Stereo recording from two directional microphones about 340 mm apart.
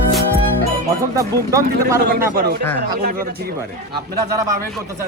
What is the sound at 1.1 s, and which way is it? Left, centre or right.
Speech, centre.